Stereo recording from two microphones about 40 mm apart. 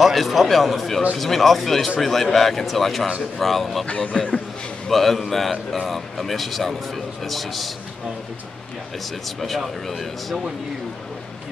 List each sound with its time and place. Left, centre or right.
0.0 s a man's voice: centre
3.8 s speech: left
4.8 s a man's voice: centre